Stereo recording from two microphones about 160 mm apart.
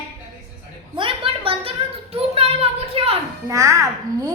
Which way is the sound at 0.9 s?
35° right (ahead or behind).